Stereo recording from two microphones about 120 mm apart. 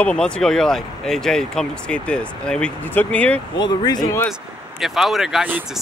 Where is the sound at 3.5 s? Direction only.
35° left (ahead or behind).